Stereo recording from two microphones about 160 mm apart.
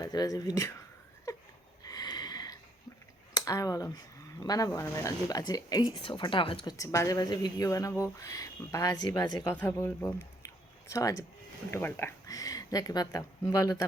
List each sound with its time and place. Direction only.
0.0 s speech: 25° left (ahead or behind)
1.3 s a sound: 20° left (ahead or behind)
3.3 s speech: 20° left (ahead or behind)
6.7 s speech: 20° left (ahead or behind)